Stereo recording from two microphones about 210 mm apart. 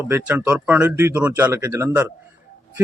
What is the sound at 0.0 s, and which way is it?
Speech, 10° right (ahead or behind).